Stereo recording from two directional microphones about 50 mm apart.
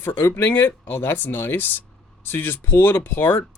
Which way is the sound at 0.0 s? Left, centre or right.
Left.